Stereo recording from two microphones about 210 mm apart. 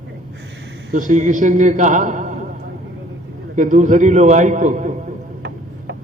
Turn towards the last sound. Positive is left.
turn(degrees=-35)  # may be behind; listen again after turning